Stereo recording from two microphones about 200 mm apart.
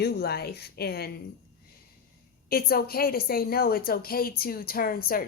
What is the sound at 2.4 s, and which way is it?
Speech, 50° left (ahead or behind).